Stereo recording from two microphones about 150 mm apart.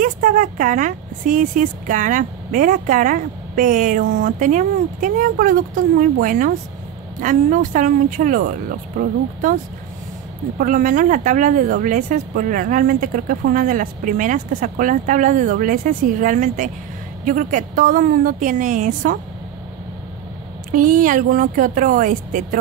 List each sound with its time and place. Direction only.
0.0 s speech: 60° right (ahead or behind)
10.6 s speech: 60° right (ahead or behind)
20.7 s speech: 65° right (ahead or behind)